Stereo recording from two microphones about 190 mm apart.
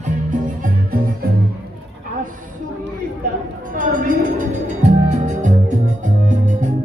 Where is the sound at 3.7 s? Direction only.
45° right (ahead or behind).